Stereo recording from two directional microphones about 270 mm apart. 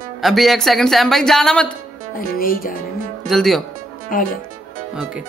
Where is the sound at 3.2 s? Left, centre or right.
Centre.